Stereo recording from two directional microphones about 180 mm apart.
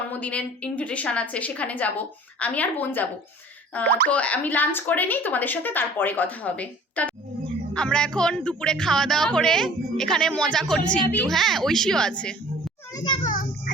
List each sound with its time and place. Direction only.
0.1 s a woman's voice: 10° left (ahead or behind)
13.2 s children playing: 50° left (ahead or behind)